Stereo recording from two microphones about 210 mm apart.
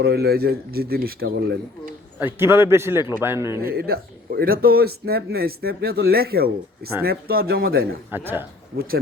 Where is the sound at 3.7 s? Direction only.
50° right (ahead or behind).